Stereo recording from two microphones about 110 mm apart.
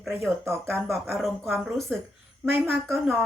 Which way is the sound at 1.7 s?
Centre (ahead or behind).